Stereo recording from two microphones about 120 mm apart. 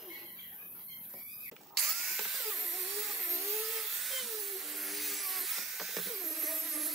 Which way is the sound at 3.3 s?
20° right (ahead or behind).